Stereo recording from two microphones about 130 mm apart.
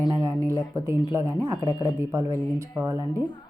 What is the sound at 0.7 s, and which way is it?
Speech, 25° right (ahead or behind).